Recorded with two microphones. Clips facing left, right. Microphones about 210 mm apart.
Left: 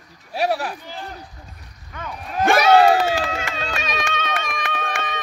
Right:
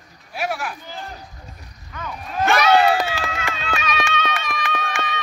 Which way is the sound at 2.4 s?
35° left (ahead or behind).